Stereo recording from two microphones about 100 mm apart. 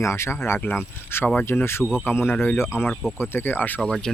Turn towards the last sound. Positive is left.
turn(degrees=5)  # may be behind; listen again after turning